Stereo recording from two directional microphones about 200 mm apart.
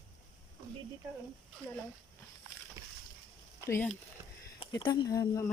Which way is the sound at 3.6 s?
15° left (ahead or behind).